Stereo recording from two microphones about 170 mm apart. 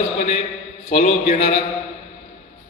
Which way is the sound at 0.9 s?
40° left (ahead or behind).